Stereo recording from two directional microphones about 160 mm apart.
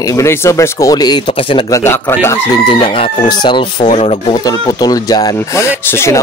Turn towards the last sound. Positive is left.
turn(degrees=15)  # may be behind; listen again after turning